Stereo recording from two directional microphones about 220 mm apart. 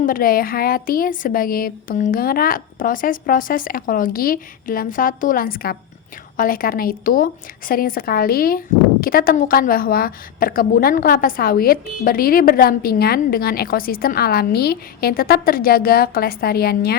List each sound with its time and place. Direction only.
0.0 s a woman's voice: 40° left (ahead or behind)